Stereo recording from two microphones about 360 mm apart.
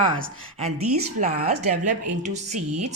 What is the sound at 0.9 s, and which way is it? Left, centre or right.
A woman's voice, centre.